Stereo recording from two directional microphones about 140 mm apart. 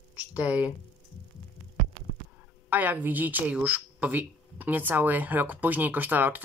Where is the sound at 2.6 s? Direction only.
10° right (ahead or behind).